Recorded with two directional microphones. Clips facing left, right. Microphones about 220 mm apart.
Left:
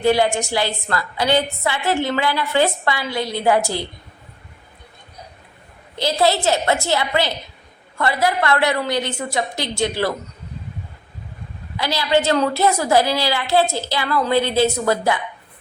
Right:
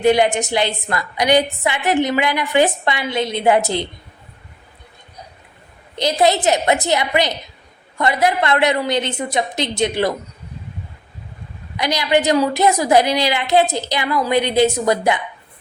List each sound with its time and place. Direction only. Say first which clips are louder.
0.0 s a woman's voice: right 2 dB; 20° right (ahead or behind)
6.0 s a woman's voice: right 2 dB; 20° right (ahead or behind)
11.8 s a woman's voice: right 1 dB; 15° right (ahead or behind)